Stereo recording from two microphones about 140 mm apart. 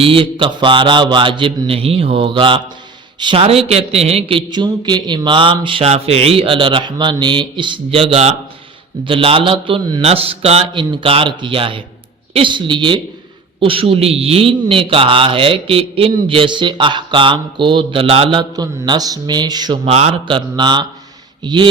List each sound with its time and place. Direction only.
0.0 s mantra: 40° right (ahead or behind)
3.7 s a sound: 50° right (ahead or behind)
4.5 s mantra: 30° right (ahead or behind)
10.0 s a sound: 45° right (ahead or behind)
10.9 s mantra: 40° right (ahead or behind)
18.5 s speech: 25° right (ahead or behind)
19.8 s mantra: 45° right (ahead or behind)